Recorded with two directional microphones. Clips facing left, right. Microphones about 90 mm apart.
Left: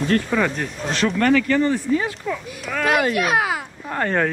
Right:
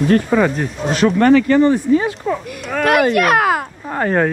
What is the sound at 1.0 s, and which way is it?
Speech, 30° right (ahead or behind).